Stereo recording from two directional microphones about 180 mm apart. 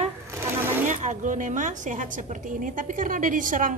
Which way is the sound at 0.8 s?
45° right (ahead or behind).